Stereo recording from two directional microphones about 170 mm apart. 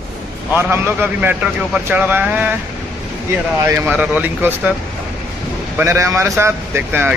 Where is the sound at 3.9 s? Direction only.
10° right (ahead or behind).